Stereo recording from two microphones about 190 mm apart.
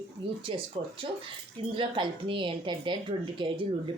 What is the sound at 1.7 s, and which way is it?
Speech, 25° right (ahead or behind).